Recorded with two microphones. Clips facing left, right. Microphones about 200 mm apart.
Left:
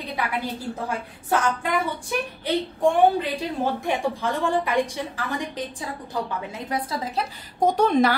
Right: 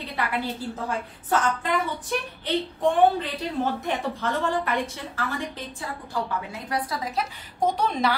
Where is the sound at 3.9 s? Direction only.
10° left (ahead or behind).